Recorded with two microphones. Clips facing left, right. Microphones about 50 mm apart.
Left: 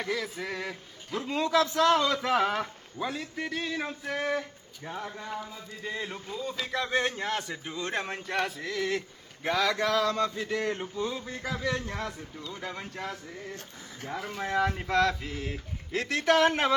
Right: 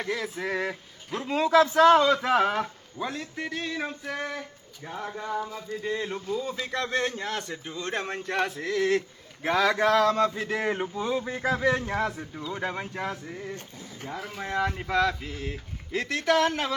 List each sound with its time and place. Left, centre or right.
0.2 s speech: centre
1.1 s a man's voice: centre
1.5 s a sound: right
2.0 s a man's voice: centre
4.8 s a man's voice: centre
6.8 s a man's voice: centre
8.0 s a man's voice: centre
10.3 s a sound: centre
11.4 s a man's voice: right
12.5 s a sound: right
14.1 s a man's voice: centre
16.3 s speech: left